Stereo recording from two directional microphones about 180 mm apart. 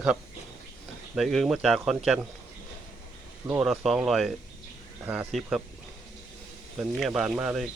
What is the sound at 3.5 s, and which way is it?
Speech, 5° right (ahead or behind).